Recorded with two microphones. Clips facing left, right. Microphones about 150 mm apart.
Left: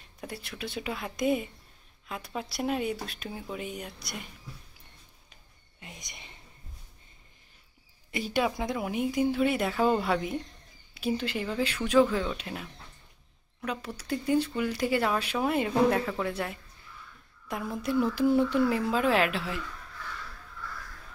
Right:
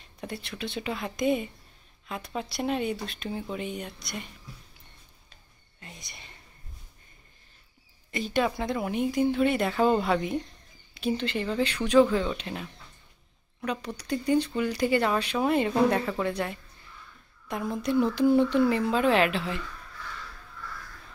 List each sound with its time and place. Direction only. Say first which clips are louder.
0.2 s speech: right 3 dB; 5° left (ahead or behind)
5.8 s whispering: even; 15° left (ahead or behind)
8.1 s speech: right 2 dB; 10° left (ahead or behind)
13.7 s speech: right 2 dB; 5° left (ahead or behind)